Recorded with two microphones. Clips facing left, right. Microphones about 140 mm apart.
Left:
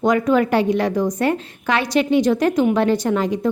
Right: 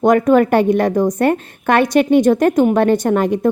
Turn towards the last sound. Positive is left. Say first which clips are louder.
# right 4 dB
turn(degrees=-55)  # may be behind; listen again after turning